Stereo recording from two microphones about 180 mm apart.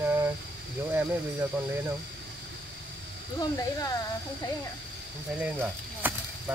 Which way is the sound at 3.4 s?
20° left (ahead or behind).